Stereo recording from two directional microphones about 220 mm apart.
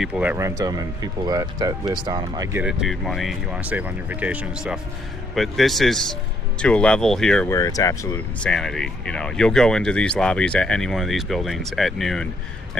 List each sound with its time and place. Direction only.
0.0 s speech: 5° right (ahead or behind)
7.5 s speech: 15° left (ahead or behind)
8.4 s speech: 5° left (ahead or behind)